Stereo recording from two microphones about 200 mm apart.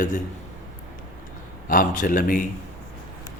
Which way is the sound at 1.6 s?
45° left (ahead or behind).